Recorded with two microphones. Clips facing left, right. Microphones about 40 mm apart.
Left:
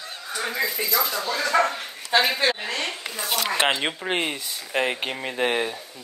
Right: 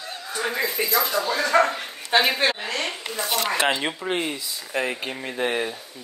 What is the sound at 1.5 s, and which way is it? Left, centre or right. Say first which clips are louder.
Dog: right 2 dB; centre.